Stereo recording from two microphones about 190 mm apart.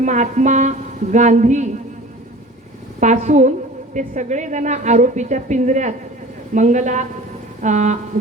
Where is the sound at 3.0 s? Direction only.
40° right (ahead or behind).